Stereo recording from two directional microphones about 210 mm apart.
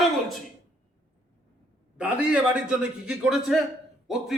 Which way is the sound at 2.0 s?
5° right (ahead or behind).